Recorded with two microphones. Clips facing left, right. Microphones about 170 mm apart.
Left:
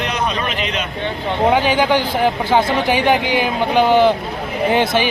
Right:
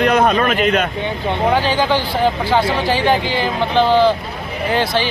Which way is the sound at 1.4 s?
15° left (ahead or behind).